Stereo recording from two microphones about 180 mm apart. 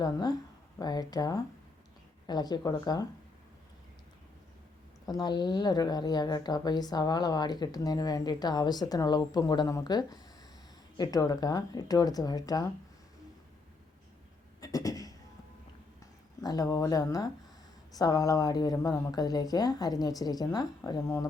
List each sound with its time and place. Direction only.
0.0 s speech: 20° left (ahead or behind)
5.0 s speech: 20° left (ahead or behind)
14.6 s a sound: 20° left (ahead or behind)
16.4 s speech: 20° left (ahead or behind)